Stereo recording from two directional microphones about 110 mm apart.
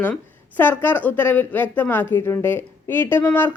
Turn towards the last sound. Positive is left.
turn(degrees=15)  # may be behind; listen again after turning